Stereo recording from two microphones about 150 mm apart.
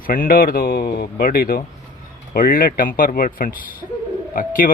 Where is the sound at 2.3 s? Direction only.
75° left (ahead or behind).